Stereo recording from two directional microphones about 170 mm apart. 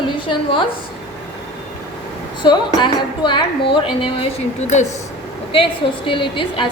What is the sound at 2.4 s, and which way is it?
A woman's voice, 25° left (ahead or behind).